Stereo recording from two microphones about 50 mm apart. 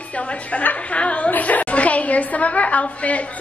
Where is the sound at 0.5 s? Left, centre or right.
Left.